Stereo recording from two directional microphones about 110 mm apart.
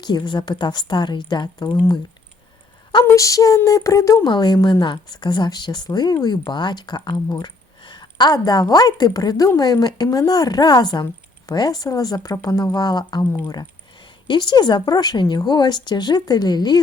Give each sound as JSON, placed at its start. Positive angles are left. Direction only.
{"t": 0.0, "sound": "speech", "side_deg": 40}
{"t": 3.0, "sound": "speech", "side_deg": 30}
{"t": 4.3, "sound": "a woman's voice", "side_deg": 40}